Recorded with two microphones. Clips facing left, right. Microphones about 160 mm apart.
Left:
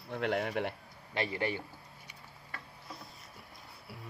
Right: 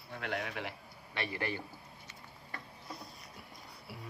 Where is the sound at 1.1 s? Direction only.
25° left (ahead or behind).